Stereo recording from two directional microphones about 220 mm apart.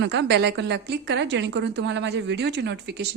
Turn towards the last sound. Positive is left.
turn(degrees=-50)  # may be behind; listen again after turning